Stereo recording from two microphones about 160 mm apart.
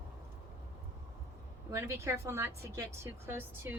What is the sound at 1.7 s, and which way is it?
A woman's voice, 15° right (ahead or behind).